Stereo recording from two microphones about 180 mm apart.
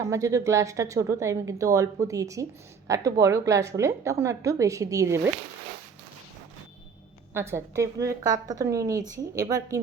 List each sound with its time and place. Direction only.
0.1 s a woman's voice: 15° right (ahead or behind)
7.3 s a woman's voice: 15° right (ahead or behind)